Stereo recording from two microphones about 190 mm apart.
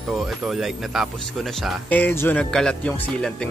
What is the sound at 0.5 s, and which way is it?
Speech, centre (ahead or behind).